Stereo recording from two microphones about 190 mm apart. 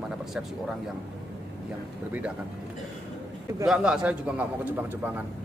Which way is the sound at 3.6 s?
5° right (ahead or behind).